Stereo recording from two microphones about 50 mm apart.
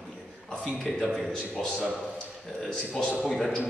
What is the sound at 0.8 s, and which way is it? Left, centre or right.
A man's voice, centre.